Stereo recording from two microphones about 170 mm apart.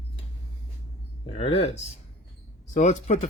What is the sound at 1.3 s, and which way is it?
Speech, 35° left (ahead or behind).